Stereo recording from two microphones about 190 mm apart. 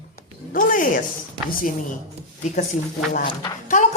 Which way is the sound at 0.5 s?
45° left (ahead or behind).